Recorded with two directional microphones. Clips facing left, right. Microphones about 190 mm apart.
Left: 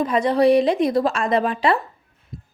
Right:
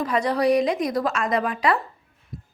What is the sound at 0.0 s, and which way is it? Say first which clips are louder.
Speech: left 4 dB; 25° left (ahead or behind).